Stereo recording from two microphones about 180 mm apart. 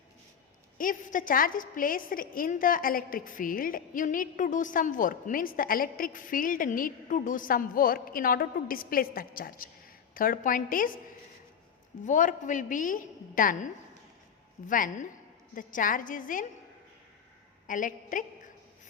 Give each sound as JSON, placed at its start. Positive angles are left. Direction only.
{"t": 0.8, "sound": "a woman's voice", "side_deg": 50}
{"t": 12.0, "sound": "a woman's voice", "side_deg": 45}
{"t": 14.7, "sound": "a woman's voice", "side_deg": 45}
{"t": 17.7, "sound": "a woman's voice", "side_deg": 45}